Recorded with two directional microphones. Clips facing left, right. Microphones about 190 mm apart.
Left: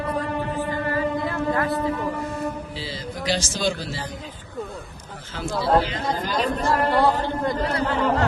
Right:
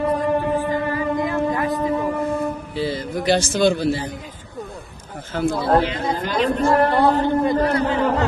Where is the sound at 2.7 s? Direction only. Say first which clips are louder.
Right 9 dB; 55° right (ahead or behind).